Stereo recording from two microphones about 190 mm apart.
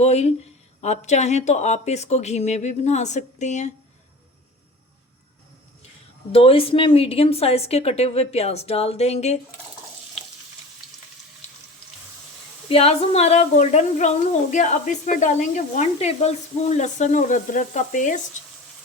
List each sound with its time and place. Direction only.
0.0 s speech: 35° left (ahead or behind)
6.3 s speech: 30° left (ahead or behind)
12.6 s speech: 30° left (ahead or behind)